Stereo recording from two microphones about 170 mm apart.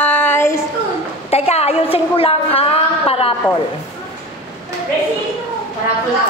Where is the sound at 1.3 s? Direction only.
35° left (ahead or behind).